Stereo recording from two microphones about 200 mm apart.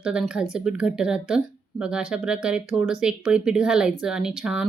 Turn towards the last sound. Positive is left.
turn(degrees=-5)  # may be behind; listen again after turning